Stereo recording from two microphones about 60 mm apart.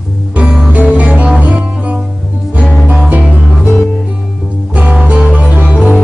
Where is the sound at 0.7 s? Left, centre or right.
Right.